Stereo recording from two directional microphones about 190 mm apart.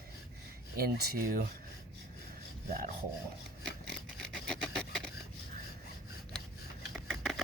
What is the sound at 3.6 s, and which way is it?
Scissors, 5° left (ahead or behind).